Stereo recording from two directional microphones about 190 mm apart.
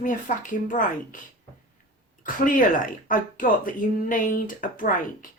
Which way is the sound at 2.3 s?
45° left (ahead or behind).